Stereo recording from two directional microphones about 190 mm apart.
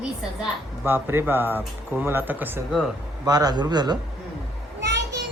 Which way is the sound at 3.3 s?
20° right (ahead or behind).